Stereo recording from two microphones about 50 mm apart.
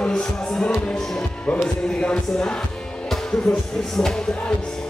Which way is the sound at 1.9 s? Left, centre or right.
Centre.